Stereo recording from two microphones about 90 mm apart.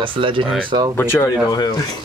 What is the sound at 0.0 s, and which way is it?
Speech, 70° right (ahead or behind).